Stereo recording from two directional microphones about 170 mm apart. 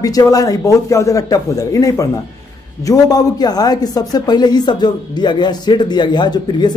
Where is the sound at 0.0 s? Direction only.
20° left (ahead or behind).